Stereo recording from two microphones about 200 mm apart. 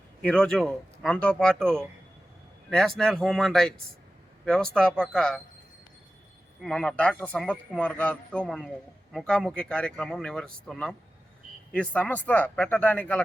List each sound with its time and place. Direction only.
0.2 s a man's voice: 5° left (ahead or behind)
6.6 s a man's voice: centre (ahead or behind)